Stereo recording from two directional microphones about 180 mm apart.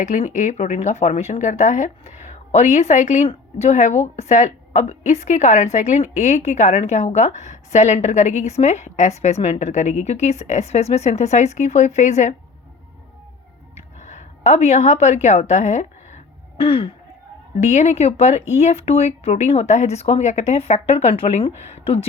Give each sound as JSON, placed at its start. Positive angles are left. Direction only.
{"t": 0.0, "sound": "speech", "side_deg": 45}
{"t": 13.7, "sound": "a sound", "side_deg": 40}
{"t": 17.6, "sound": "speech", "side_deg": 40}